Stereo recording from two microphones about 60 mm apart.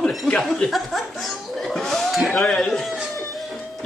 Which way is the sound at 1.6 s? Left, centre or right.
Centre.